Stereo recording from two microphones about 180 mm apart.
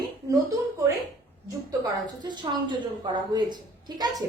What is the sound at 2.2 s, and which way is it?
A woman's voice, 25° right (ahead or behind).